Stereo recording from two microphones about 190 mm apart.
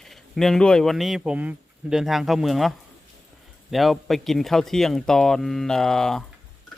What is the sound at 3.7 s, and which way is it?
Speech, centre (ahead or behind).